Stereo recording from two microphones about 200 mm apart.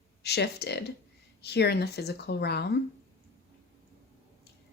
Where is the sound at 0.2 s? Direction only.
55° left (ahead or behind).